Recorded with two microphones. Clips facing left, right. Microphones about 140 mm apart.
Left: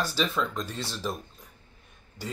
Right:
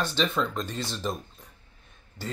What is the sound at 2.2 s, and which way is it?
Speech, 15° left (ahead or behind).